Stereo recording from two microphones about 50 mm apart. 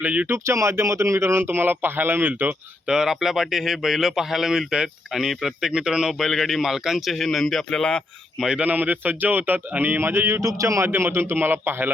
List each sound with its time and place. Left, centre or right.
0.0 s speech: right
0.3 s speech: right
2.8 s speech: centre
6.1 s speech: centre
8.6 s speech: right
10.0 s speech: right
10.8 s speech: right